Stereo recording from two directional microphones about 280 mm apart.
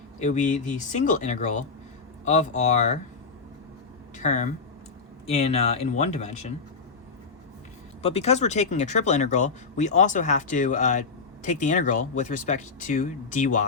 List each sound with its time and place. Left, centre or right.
0.2 s speech: left
4.2 s speech: left
8.0 s speech: left